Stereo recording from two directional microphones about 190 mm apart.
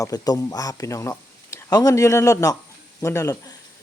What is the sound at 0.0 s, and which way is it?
Speech, 20° left (ahead or behind).